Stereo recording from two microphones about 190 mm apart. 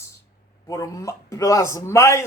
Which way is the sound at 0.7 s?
15° left (ahead or behind).